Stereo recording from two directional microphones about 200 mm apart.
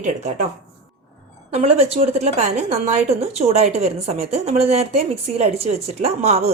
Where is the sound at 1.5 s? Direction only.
30° right (ahead or behind).